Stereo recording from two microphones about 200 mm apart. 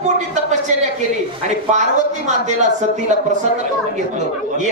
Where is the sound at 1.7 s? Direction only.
35° right (ahead or behind).